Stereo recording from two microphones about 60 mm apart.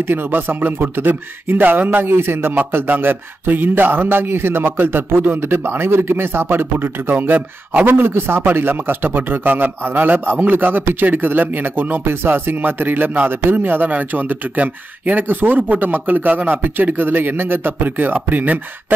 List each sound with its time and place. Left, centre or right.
0.0 s speech: right
7.9 s speech: right